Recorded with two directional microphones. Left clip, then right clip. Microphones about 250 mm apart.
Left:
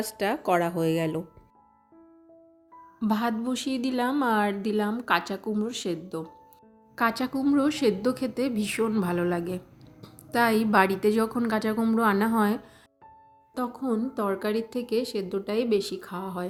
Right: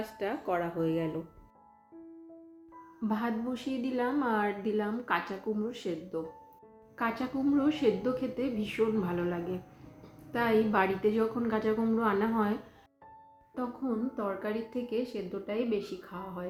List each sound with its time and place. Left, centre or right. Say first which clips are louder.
0.0 s a woman's voice: left 7 dB; left
3.0 s a woman's voice: left 6 dB; left
13.6 s a woman's voice: left 5 dB; left